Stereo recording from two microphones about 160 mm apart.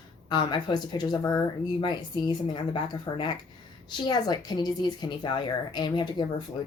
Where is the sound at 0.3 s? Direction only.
25° left (ahead or behind).